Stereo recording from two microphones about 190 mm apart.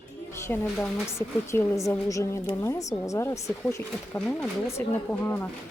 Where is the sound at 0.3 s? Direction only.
15° left (ahead or behind).